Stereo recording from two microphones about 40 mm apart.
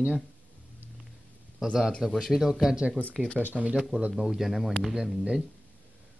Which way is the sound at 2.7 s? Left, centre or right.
Right.